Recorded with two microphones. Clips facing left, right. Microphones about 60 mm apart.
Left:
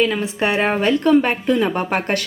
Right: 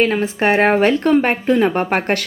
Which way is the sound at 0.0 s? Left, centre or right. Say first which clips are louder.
Right 3 dB; right.